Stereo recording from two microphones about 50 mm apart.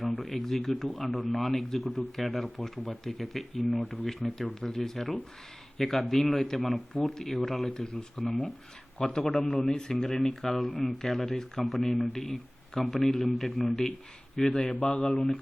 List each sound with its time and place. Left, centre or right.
0.0 s speech: centre
9.0 s speech: centre
10.7 s speech: left
11.1 s speech: centre